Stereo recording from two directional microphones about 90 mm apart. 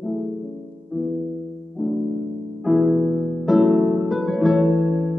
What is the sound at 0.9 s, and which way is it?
Music, centre (ahead or behind).